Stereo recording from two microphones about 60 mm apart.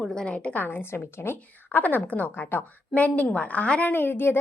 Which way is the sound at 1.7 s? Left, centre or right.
Left.